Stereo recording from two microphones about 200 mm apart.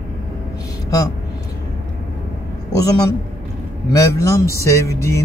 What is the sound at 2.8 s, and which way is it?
Speech, 20° left (ahead or behind).